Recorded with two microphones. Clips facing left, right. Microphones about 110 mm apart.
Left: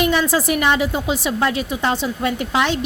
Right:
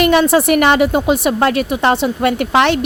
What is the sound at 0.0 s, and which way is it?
A woman's voice, 65° right (ahead or behind).